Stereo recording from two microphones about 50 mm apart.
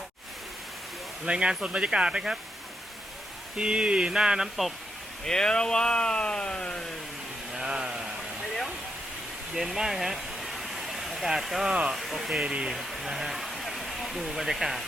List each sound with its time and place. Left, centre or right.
1.2 s speech: centre
3.6 s speech: centre
5.2 s speech: centre
7.5 s sheep: centre
9.6 s a sound: centre
11.7 s speech: centre
11.9 s speech: centre
12.5 s speech: centre
12.7 s speech: centre